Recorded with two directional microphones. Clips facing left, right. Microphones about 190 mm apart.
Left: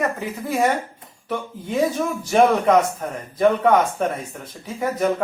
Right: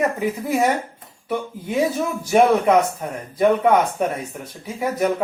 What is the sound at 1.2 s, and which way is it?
Speech, 10° right (ahead or behind).